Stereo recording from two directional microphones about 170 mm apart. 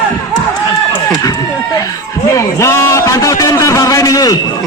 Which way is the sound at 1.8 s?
20° left (ahead or behind).